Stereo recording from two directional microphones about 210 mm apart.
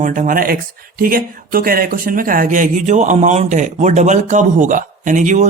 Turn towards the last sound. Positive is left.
turn(degrees=-35)  # may be behind; listen again after turning